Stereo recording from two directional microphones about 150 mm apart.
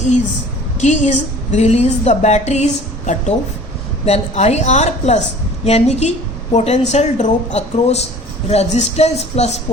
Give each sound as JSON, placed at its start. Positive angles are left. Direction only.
{"t": 0.8, "sound": "a woman's voice", "side_deg": 50}